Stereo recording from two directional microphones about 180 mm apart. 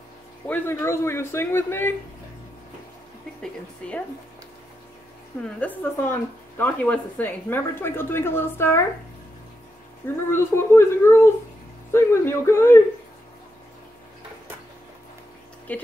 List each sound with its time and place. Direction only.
0.5 s speech: 15° left (ahead or behind)
3.8 s speech: 5° left (ahead or behind)
5.6 s speech: 10° left (ahead or behind)
10.0 s speech: 15° left (ahead or behind)
15.7 s speech: 10° left (ahead or behind)